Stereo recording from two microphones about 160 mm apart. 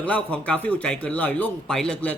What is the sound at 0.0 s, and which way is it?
A man's voice, 10° left (ahead or behind).